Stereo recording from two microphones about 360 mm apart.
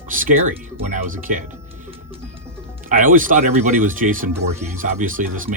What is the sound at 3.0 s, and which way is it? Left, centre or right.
Speech, right.